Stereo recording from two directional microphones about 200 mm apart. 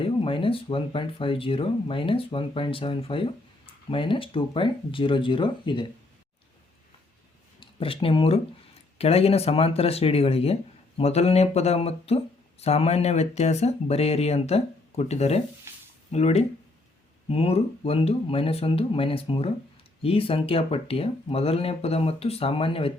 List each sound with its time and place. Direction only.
0.0 s speech: 25° left (ahead or behind)
7.6 s speech: 25° left (ahead or behind)